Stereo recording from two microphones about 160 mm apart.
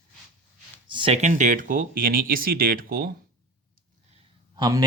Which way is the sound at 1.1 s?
50° right (ahead or behind).